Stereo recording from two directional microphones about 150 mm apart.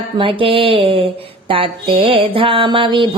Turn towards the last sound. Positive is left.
turn(degrees=-35)  # may be behind; listen again after turning